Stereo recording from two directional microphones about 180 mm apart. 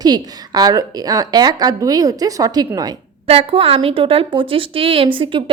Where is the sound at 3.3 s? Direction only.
30° right (ahead or behind).